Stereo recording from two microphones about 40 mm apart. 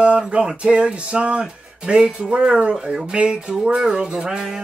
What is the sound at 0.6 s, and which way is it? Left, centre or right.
Music, right.